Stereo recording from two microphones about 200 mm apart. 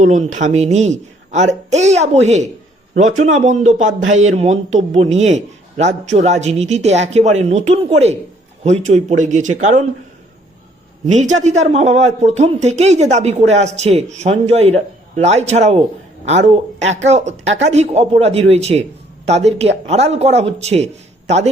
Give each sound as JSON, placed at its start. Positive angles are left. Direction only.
{"t": 0.0, "sound": "a man's voice", "side_deg": -40}
{"t": 11.0, "sound": "a man's voice", "side_deg": -35}
{"t": 17.4, "sound": "speech", "side_deg": -65}
{"t": 17.7, "sound": "a man's voice", "side_deg": -35}